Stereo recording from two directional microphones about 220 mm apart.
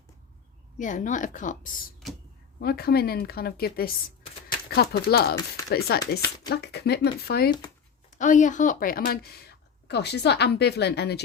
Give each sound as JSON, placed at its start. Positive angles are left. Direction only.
{"t": 0.8, "sound": "a woman's voice", "side_deg": 35}
{"t": 2.6, "sound": "a woman's voice", "side_deg": 45}
{"t": 8.2, "sound": "a woman's voice", "side_deg": 35}